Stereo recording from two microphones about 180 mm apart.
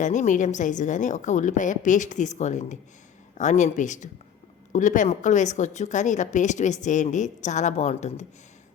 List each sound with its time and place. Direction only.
0.0 s a woman's voice: 45° left (ahead or behind)